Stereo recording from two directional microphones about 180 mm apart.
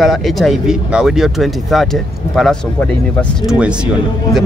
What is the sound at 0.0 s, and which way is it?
Speech, centre (ahead or behind).